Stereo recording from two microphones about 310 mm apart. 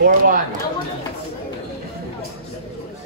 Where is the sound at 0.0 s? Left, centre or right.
Right.